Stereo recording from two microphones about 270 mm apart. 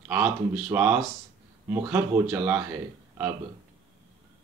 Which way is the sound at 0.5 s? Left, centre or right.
Centre.